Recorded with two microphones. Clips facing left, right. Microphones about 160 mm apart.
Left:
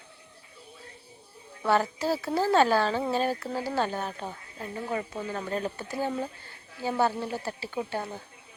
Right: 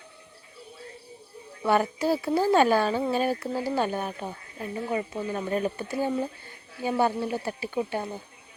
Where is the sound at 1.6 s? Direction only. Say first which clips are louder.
Right 2 dB; 15° right (ahead or behind).